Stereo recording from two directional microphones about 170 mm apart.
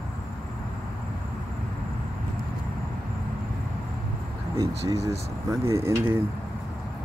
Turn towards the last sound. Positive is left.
turn(degrees=-15)  # may be behind; listen again after turning